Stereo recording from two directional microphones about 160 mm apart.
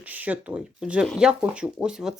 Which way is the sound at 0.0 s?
10° right (ahead or behind).